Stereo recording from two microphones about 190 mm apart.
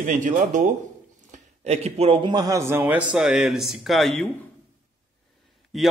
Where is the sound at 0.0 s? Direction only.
40° right (ahead or behind); by 4.3 s centre (ahead or behind).